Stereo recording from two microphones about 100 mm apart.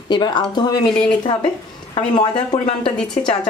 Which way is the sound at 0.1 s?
45° left (ahead or behind).